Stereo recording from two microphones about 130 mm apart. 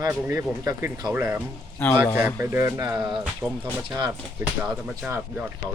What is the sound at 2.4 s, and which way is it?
Speech, 20° right (ahead or behind).